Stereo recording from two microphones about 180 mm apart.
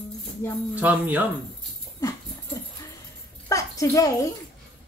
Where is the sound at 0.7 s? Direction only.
10° right (ahead or behind).